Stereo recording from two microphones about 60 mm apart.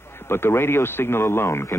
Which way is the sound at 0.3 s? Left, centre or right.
Left.